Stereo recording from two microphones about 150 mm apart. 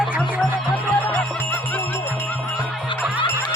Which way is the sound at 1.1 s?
10° left (ahead or behind).